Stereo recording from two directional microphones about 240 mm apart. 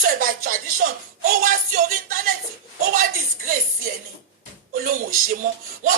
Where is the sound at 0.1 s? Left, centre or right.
Right.